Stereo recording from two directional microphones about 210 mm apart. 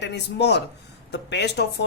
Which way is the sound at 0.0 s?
55° left (ahead or behind).